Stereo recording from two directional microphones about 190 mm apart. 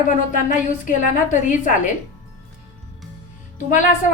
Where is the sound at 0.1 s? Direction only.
45° left (ahead or behind).